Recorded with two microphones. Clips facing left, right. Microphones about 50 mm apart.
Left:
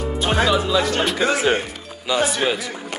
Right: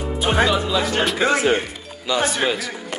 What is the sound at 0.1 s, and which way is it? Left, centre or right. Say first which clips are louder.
Music: right 2 dB; centre.